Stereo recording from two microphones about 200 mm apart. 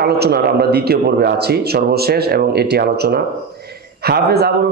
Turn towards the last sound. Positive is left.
turn(degrees=-55)  # may be behind; listen again after turning